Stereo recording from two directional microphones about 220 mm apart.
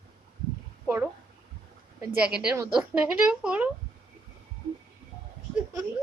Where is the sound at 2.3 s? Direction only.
5° right (ahead or behind).